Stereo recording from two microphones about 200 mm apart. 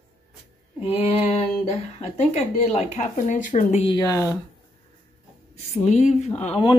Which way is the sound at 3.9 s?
15° left (ahead or behind).